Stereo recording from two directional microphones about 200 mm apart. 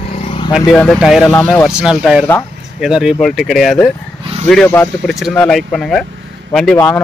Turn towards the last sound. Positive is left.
turn(degrees=5)  # may be behind; listen again after turning